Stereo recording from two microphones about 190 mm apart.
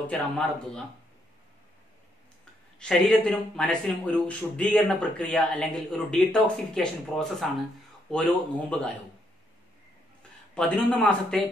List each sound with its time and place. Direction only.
0.0 s speech: 5° left (ahead or behind)
2.8 s speech: 5° left (ahead or behind)
10.5 s speech: 5° left (ahead or behind)